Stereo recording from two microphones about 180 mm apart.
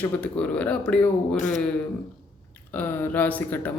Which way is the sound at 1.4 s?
45° left (ahead or behind).